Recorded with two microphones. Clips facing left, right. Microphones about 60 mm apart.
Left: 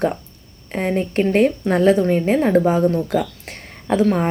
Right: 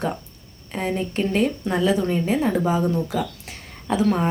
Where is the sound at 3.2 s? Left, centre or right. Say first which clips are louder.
Left 2 dB; left.